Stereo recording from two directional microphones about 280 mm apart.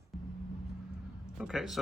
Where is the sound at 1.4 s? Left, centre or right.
Centre.